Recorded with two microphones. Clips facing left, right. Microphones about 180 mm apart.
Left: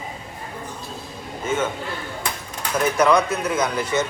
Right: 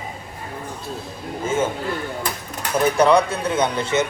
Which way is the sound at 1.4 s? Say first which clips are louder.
Right 2 dB; 30° right (ahead or behind).